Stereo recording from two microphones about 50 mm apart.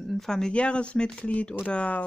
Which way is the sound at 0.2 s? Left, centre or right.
Centre.